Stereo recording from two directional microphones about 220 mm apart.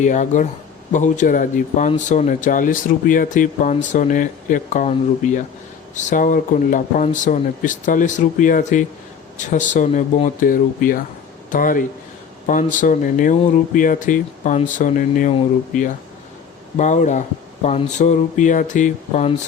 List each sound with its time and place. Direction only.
0.0 s speech: 35° left (ahead or behind)